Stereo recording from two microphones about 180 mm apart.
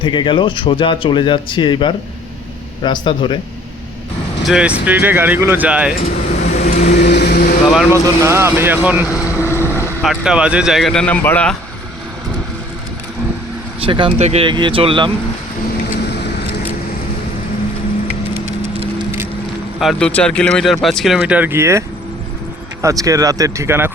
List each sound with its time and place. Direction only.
0.0 s speech: 25° left (ahead or behind)
4.4 s speech: 5° right (ahead or behind)
6.0 s vehicle: 40° left (ahead or behind)
6.9 s vehicle: 65° left (ahead or behind)
8.2 s speech: 15° right (ahead or behind)
9.4 s boat: 15° left (ahead or behind)
10.0 s speech: 5° right (ahead or behind)
13.8 s speech: 30° right (ahead or behind)
18.3 s a sound: 35° right (ahead or behind)
19.8 s speech: centre (ahead or behind); by 23.9 s 15° right (ahead or behind)